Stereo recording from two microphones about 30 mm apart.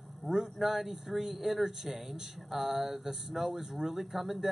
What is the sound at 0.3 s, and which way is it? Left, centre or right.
Speech, centre.